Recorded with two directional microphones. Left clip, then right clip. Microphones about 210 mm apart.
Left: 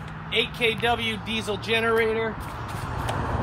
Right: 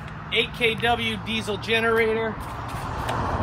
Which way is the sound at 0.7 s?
30° left (ahead or behind).